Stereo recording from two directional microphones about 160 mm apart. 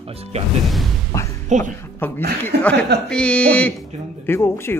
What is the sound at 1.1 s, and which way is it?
Speech, 20° left (ahead or behind).